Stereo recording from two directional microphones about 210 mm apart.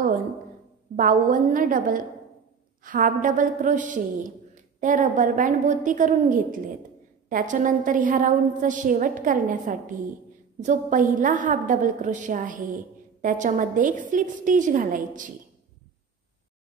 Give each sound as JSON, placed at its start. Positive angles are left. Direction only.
{"t": 0.9, "sound": "a woman's voice", "side_deg": -40}